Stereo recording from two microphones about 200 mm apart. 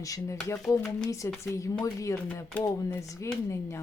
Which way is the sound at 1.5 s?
15° left (ahead or behind).